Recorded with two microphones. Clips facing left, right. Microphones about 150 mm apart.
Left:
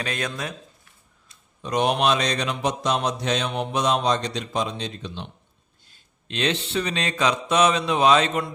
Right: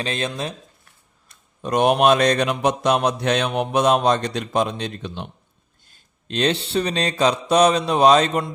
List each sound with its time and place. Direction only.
0.0 s speech: 25° right (ahead or behind)
1.3 s speech: 50° right (ahead or behind)
6.2 s mantra: 40° right (ahead or behind)